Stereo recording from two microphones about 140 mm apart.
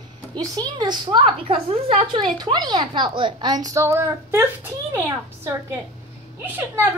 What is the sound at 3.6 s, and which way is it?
A woman's voice, 20° right (ahead or behind).